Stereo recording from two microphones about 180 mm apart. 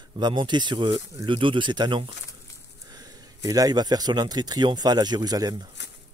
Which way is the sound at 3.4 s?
20° right (ahead or behind).